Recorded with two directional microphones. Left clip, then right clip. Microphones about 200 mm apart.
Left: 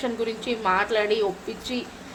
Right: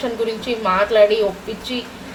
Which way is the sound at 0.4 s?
45° left (ahead or behind).